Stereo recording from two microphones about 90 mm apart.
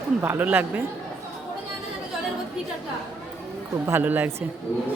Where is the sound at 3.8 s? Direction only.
25° right (ahead or behind).